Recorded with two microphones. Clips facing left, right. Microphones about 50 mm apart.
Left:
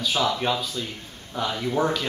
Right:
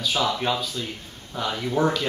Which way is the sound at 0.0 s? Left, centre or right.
Centre.